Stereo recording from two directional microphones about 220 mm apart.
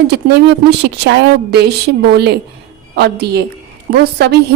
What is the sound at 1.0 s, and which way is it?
Speech, 50° right (ahead or behind).